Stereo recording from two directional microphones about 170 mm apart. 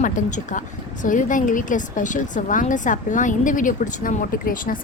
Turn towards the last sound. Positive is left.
turn(degrees=55)  # may be behind; listen again after turning